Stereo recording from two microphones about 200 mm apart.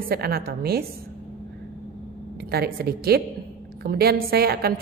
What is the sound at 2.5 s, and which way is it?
A woman's voice, 50° right (ahead or behind).